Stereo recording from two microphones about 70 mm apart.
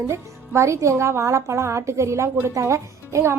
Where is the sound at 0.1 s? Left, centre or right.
Right.